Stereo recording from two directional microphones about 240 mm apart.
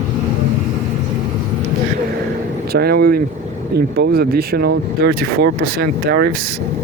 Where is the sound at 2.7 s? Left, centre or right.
Right.